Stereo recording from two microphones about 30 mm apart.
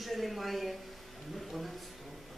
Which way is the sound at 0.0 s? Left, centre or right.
Centre.